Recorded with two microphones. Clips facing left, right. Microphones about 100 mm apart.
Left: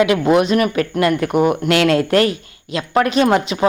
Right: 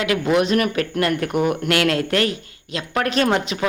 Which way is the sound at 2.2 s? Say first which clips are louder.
Left 4 dB; 30° right (ahead or behind).